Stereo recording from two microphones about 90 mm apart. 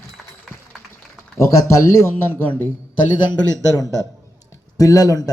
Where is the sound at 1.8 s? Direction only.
30° left (ahead or behind).